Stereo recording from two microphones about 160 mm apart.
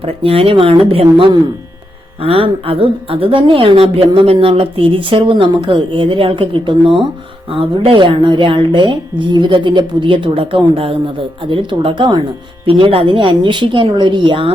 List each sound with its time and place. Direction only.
0.0 s a woman's voice: 35° right (ahead or behind)